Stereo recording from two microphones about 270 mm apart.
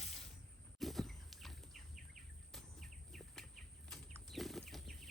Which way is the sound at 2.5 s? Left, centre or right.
Centre.